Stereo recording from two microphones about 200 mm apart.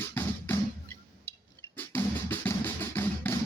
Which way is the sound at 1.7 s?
10° left (ahead or behind).